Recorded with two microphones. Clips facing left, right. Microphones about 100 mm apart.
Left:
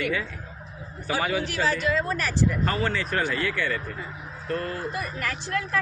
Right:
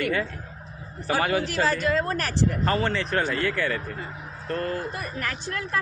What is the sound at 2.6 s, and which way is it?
A man's voice, 25° right (ahead or behind).